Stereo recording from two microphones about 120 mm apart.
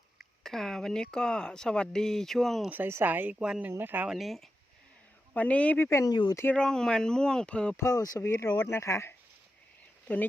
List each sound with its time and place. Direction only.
0.2 s speech: 5° left (ahead or behind)
2.6 s speech: 15° right (ahead or behind)
4.1 s speech: centre (ahead or behind)
5.3 s speech: 10° left (ahead or behind)
6.6 s speech: 5° left (ahead or behind)
7.8 s speech: 25° left (ahead or behind)